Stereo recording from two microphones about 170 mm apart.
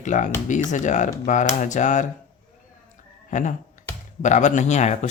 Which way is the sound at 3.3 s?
50° left (ahead or behind).